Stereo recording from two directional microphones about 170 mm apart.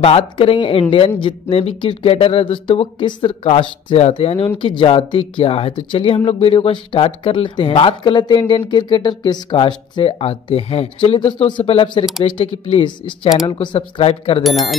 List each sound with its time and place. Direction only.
0.0 s speech: 35° left (ahead or behind)
14.4 s speech: centre (ahead or behind)